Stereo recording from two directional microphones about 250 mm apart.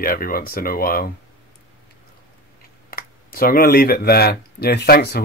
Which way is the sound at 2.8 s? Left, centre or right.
Left.